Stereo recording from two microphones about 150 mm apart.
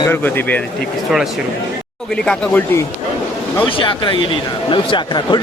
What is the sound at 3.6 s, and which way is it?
Speech, 35° left (ahead or behind).